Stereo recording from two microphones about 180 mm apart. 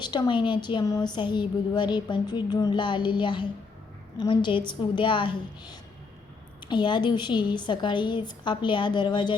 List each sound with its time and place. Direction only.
0.0 s a woman's voice: 25° left (ahead or behind)